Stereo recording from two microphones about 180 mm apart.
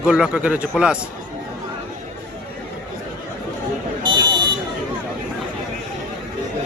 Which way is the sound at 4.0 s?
25° right (ahead or behind).